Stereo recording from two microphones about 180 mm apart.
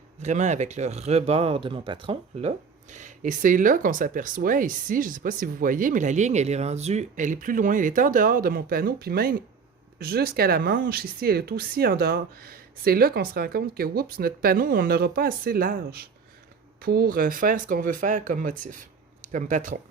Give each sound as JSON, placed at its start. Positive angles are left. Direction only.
{"t": 0.2, "sound": "speech", "side_deg": -40}